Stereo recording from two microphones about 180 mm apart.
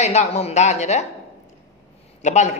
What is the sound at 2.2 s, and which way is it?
Speech, 40° left (ahead or behind).